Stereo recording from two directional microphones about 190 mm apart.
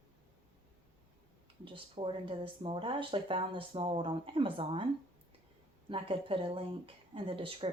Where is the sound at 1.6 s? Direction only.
30° right (ahead or behind).